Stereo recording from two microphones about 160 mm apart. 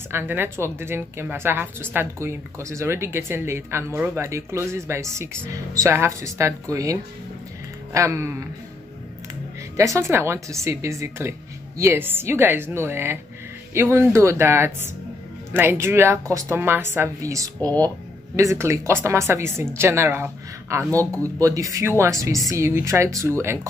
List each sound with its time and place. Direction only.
0.1 s speech: 15° right (ahead or behind)
9.8 s speech: 20° right (ahead or behind)